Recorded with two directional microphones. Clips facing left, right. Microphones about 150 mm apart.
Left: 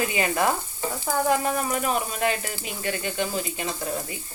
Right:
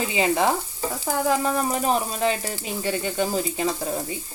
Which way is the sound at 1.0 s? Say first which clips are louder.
Right 1 dB; 30° right (ahead or behind).